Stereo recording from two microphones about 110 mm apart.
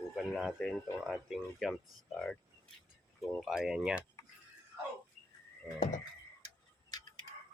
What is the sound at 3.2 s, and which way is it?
Speech, centre (ahead or behind).